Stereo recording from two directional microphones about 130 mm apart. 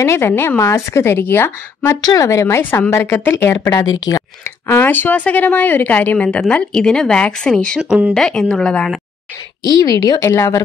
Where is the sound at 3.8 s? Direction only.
30° left (ahead or behind).